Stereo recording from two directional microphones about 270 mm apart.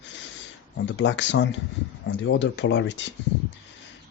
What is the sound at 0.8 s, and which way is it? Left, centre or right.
Speech, left.